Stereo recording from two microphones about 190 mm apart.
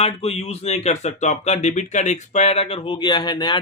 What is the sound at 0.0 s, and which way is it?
Speech, 30° left (ahead or behind).